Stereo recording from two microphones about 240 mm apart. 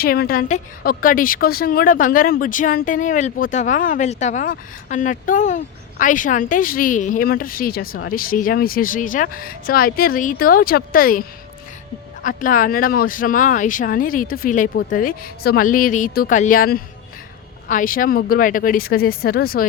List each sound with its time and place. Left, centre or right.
0.0 s a woman's voice: left